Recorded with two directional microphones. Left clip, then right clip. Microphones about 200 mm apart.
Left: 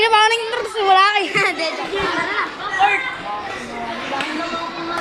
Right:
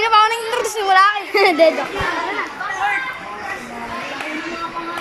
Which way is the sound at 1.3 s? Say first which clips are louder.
Right 5 dB; 30° right (ahead or behind).